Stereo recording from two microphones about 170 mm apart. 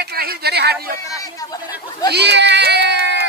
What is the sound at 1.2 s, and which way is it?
Speech, 20° left (ahead or behind).